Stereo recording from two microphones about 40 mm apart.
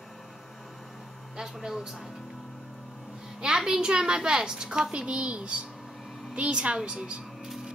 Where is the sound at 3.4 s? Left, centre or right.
Centre.